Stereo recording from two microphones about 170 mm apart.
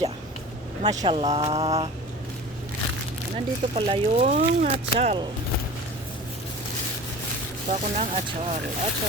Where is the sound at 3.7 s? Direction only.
35° right (ahead or behind).